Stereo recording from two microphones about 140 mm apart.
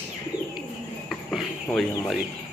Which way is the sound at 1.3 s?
Centre (ahead or behind).